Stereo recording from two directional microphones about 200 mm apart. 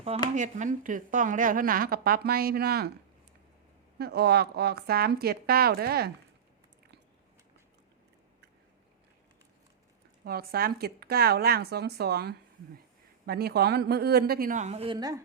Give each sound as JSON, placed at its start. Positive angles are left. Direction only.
{"t": 0.3, "sound": "a woman's voice", "side_deg": -40}
{"t": 3.9, "sound": "a woman's voice", "side_deg": -55}
{"t": 10.2, "sound": "a woman's voice", "side_deg": -50}